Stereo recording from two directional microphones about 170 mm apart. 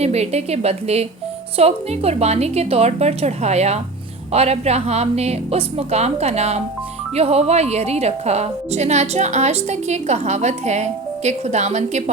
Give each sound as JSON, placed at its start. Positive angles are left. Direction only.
{"t": 0.0, "sound": "a woman's voice", "side_deg": -40}